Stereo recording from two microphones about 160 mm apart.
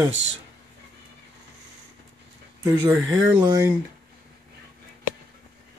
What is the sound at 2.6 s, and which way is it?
Speech, 15° right (ahead or behind).